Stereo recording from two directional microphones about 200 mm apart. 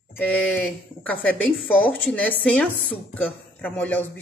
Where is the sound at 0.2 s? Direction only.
10° left (ahead or behind).